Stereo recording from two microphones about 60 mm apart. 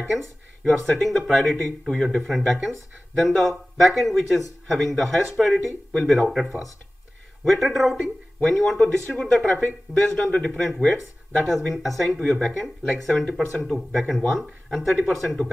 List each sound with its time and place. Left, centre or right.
0.2 s speech: centre
9.5 s speech: left
9.9 s speech: centre